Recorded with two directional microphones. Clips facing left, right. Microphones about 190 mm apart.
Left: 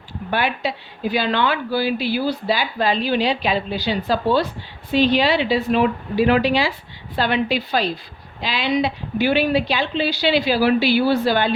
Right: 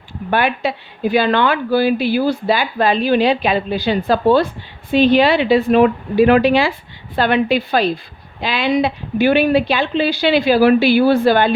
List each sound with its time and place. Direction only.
0.3 s a woman's voice: 55° right (ahead or behind)